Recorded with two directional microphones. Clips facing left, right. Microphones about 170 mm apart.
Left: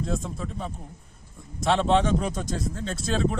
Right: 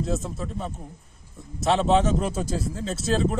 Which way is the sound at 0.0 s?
Centre (ahead or behind).